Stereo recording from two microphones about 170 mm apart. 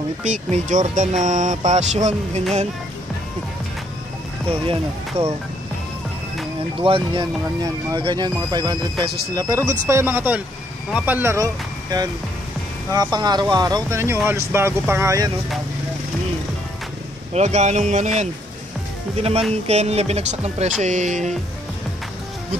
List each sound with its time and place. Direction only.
0.2 s speech: 45° right (ahead or behind)
5.2 s speech: 35° right (ahead or behind)
6.8 s speech: 30° right (ahead or behind)
17.3 s speech: 40° right (ahead or behind)